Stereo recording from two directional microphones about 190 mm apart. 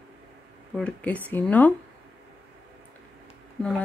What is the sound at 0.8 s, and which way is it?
Speech, 5° left (ahead or behind).